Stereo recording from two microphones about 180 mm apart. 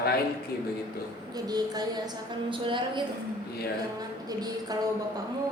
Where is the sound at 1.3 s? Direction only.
20° right (ahead or behind).